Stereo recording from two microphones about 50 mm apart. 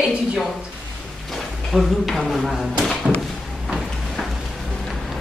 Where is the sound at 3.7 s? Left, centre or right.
Centre.